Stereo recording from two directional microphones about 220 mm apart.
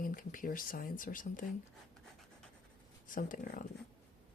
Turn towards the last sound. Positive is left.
turn(degrees=40)  # may be behind; listen again after turning